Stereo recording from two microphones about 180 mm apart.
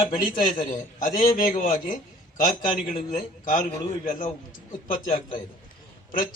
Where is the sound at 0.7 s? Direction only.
45° left (ahead or behind).